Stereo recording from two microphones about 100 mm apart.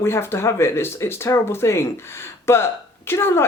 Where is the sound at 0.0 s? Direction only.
25° left (ahead or behind).